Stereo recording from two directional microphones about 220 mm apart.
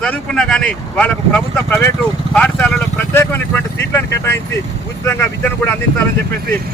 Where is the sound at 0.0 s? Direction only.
5° left (ahead or behind).